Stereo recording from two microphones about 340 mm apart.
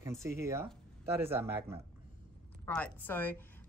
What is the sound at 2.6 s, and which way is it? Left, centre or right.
Speech, centre.